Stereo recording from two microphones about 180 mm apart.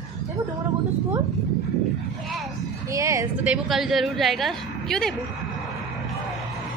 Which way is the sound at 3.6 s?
Centre (ahead or behind).